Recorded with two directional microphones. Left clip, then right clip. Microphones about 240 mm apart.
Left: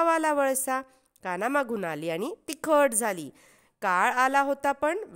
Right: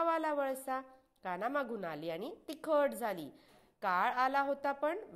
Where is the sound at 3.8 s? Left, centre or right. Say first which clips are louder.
Left 8 dB; left.